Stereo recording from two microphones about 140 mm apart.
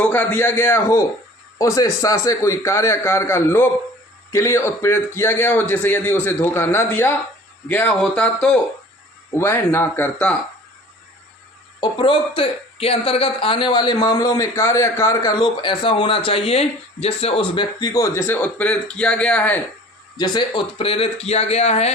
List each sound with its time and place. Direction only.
0.0 s a man's voice: 10° left (ahead or behind)
11.8 s speech: 35° left (ahead or behind); by 19.6 s 10° left (ahead or behind)
20.1 s speech: 30° left (ahead or behind); by 21.9 s 50° left (ahead or behind)